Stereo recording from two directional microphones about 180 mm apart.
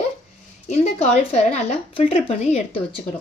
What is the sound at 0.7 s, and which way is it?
Speech, 40° left (ahead or behind).